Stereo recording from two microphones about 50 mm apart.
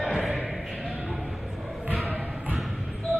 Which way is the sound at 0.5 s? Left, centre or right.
Centre.